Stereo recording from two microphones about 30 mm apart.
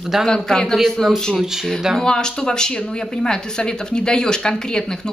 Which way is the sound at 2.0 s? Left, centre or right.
Left.